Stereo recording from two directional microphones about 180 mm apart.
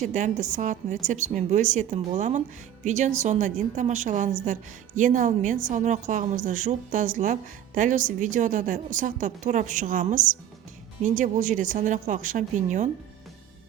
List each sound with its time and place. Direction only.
0.0 s a woman's voice: 45° right (ahead or behind)